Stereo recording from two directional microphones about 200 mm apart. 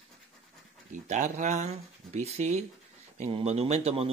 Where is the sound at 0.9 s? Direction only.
40° right (ahead or behind).